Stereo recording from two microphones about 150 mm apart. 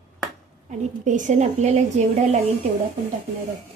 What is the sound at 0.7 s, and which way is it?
A woman's voice, 55° right (ahead or behind).